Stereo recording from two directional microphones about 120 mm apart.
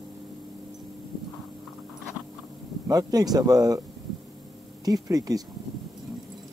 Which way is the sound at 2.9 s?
30° right (ahead or behind).